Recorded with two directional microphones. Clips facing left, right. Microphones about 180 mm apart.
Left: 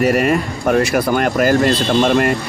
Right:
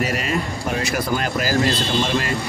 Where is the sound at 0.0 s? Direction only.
60° left (ahead or behind).